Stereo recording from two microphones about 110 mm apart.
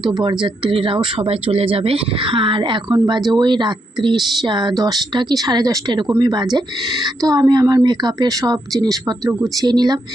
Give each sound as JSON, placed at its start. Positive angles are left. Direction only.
{"t": 0.0, "sound": "speech", "side_deg": -45}